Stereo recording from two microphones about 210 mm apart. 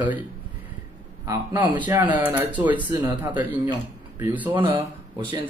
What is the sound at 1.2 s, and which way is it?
Speech, 20° right (ahead or behind).